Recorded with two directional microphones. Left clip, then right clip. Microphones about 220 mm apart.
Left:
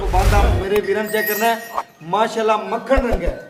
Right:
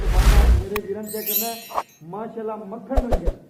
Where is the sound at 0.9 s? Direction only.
25° left (ahead or behind).